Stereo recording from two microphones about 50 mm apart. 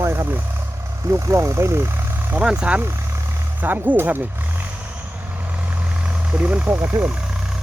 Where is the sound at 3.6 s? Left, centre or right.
Right.